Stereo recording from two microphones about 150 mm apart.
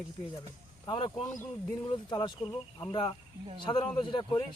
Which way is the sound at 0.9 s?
35° left (ahead or behind).